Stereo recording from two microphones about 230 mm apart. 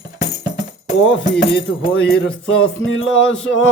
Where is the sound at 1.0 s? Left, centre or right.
Left.